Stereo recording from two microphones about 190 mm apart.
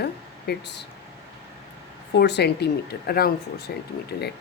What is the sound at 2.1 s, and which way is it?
Speech, 60° left (ahead or behind).